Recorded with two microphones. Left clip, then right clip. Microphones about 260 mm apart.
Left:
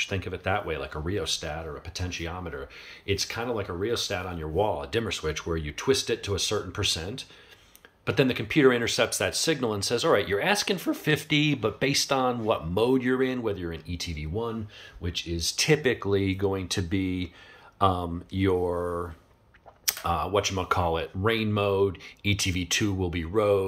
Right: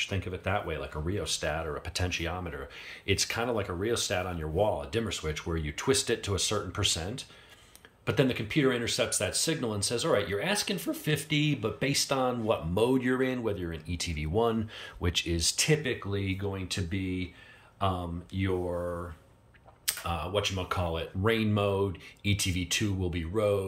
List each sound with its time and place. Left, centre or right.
0.0 s speech: centre
15.8 s speech: centre
19.8 s speech: centre